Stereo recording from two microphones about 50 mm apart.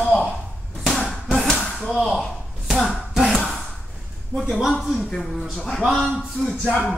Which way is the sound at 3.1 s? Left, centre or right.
Centre.